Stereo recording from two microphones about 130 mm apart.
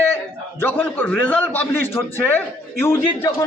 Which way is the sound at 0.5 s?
15° left (ahead or behind).